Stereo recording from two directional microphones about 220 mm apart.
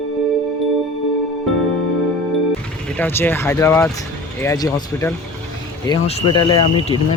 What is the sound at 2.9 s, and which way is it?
Speech, 10° left (ahead or behind).